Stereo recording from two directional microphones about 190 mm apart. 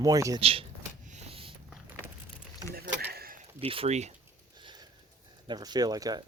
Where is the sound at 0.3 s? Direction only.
30° right (ahead or behind).